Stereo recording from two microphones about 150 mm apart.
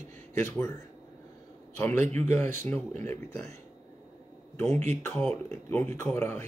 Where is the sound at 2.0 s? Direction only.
50° right (ahead or behind).